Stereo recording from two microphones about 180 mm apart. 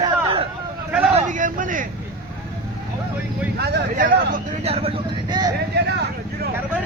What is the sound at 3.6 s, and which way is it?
Speech, 60° right (ahead or behind).